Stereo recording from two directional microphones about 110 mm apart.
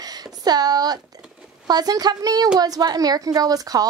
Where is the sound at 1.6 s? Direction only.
35° right (ahead or behind).